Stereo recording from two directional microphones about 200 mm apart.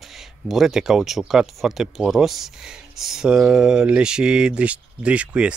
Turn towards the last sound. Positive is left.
turn(degrees=-5)  # may be behind; listen again after turning